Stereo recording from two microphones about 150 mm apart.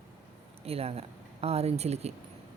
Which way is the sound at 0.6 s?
40° right (ahead or behind).